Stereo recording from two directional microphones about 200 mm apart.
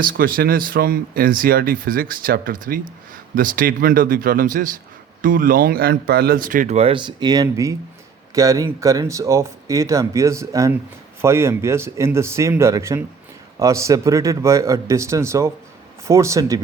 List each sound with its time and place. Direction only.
0.0 s speech: 45° right (ahead or behind); by 16.6 s 15° right (ahead or behind)